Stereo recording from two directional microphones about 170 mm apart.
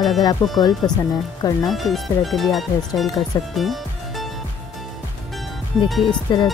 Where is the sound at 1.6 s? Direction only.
Centre (ahead or behind).